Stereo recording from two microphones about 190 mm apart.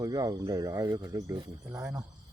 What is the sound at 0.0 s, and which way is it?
Speech, 20° right (ahead or behind).